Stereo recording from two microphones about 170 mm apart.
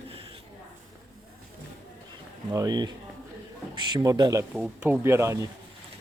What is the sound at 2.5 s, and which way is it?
A man's voice, 20° right (ahead or behind).